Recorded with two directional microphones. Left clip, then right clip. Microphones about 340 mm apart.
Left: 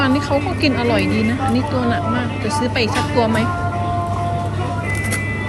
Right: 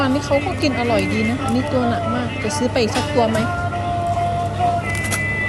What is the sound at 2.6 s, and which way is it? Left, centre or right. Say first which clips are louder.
Speech: right 1 dB; centre.